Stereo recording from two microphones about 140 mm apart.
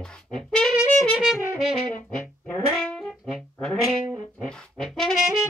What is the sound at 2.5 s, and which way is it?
Music, 5° left (ahead or behind).